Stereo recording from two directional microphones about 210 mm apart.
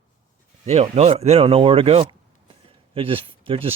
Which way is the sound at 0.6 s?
30° right (ahead or behind).